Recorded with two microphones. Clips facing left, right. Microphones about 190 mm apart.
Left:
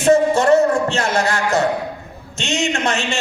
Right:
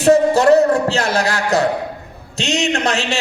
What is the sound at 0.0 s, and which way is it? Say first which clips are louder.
A man's voice: right 2 dB; 35° right (ahead or behind).